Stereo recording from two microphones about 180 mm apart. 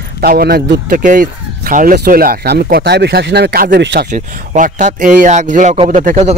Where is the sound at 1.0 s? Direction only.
50° right (ahead or behind).